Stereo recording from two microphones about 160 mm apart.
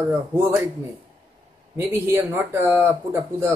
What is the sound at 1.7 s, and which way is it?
A man's voice, 15° right (ahead or behind).